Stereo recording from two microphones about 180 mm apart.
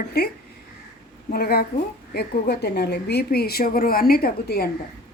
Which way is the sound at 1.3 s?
60° left (ahead or behind).